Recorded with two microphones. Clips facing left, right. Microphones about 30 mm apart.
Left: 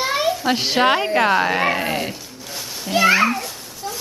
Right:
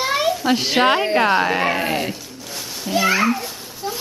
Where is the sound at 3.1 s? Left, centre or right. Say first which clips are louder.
Left 2 dB; centre.